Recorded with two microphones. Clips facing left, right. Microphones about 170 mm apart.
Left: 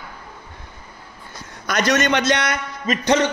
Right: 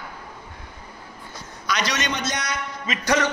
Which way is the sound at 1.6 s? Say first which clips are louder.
Left 7 dB; 50° left (ahead or behind).